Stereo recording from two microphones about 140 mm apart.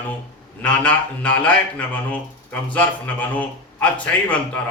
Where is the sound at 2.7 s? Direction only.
10° left (ahead or behind).